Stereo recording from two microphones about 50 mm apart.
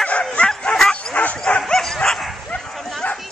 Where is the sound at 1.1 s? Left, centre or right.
Left.